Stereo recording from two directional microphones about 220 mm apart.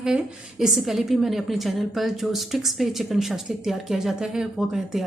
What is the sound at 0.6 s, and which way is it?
A woman's voice, centre (ahead or behind).